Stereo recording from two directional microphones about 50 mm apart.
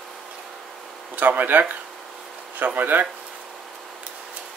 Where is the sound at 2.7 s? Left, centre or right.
Right.